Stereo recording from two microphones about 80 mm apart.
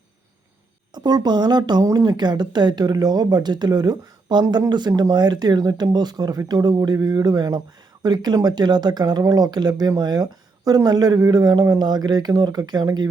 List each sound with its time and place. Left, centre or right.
0.9 s speech: right
1.8 s a man's voice: right
11.8 s speech: right